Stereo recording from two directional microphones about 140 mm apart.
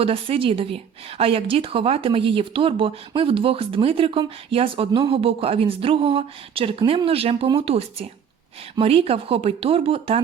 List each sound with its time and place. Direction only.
0.0 s speech: 40° right (ahead or behind)